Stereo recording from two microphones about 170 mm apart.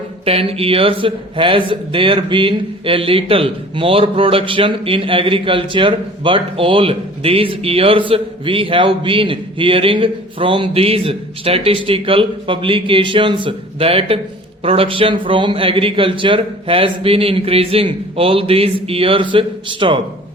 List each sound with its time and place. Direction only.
0.3 s a man's voice: 35° right (ahead or behind)